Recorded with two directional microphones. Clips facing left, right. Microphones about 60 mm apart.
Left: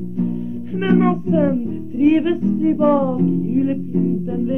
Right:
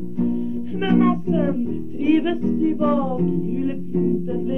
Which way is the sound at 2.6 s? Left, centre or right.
Centre.